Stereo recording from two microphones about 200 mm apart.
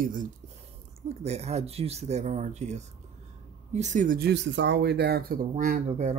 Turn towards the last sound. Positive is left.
turn(degrees=-35)  # may be behind; listen again after turning